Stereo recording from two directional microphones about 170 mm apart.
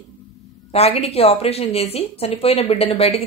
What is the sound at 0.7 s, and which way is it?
A woman's voice, 35° left (ahead or behind).